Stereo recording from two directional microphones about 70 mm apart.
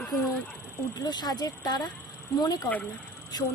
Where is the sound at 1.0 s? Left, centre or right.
Left.